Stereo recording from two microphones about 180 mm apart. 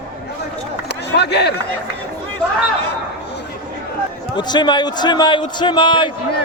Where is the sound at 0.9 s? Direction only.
70° left (ahead or behind).